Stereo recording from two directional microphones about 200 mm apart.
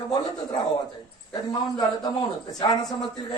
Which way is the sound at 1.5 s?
20° left (ahead or behind).